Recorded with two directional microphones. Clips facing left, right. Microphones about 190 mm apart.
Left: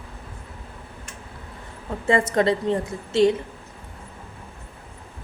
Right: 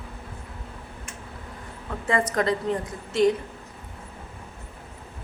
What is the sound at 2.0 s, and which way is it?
A woman's voice, 25° left (ahead or behind).